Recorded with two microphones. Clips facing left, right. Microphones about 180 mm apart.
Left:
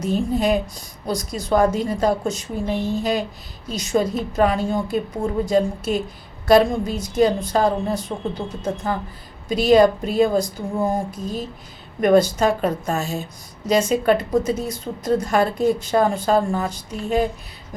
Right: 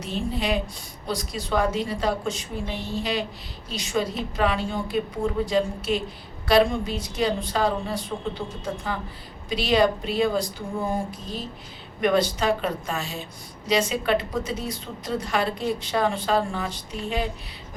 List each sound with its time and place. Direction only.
0.0 s a woman's voice: 45° left (ahead or behind)